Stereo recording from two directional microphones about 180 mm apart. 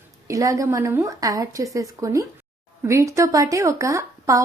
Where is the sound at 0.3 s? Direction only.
20° right (ahead or behind).